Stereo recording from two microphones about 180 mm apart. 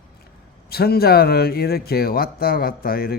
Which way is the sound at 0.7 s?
60° left (ahead or behind).